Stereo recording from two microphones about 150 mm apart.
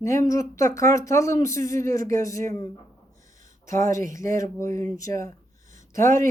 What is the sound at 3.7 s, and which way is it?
Speech, 60° right (ahead or behind).